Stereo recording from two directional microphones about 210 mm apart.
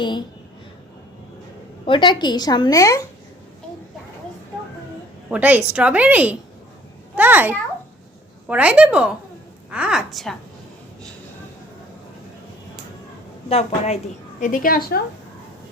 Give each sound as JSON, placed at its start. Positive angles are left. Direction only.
{"t": 0.0, "sound": "a woman's voice", "side_deg": 20}
{"t": 1.8, "sound": "a woman's voice", "side_deg": 25}
{"t": 5.3, "sound": "a woman's voice", "side_deg": -5}
{"t": 13.5, "sound": "a woman's voice", "side_deg": 30}
{"t": 14.4, "sound": "a woman's voice", "side_deg": 40}